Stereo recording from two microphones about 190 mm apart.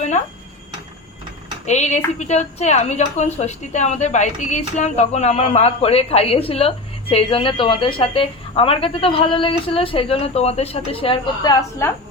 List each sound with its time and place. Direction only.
1.6 s a woman's voice: 35° left (ahead or behind)
11.8 s a woman's voice: 10° left (ahead or behind)